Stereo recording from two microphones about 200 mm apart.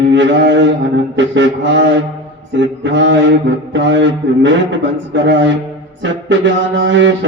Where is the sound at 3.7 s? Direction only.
65° right (ahead or behind).